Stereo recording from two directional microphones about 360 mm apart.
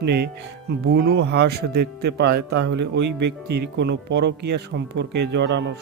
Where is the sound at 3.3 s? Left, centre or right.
Right.